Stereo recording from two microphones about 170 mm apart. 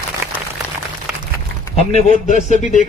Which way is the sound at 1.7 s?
40° left (ahead or behind).